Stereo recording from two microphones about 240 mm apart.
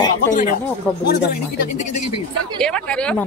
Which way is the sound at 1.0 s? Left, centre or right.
Left.